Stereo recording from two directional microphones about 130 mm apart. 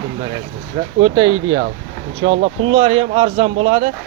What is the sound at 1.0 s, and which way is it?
Speech, 40° right (ahead or behind).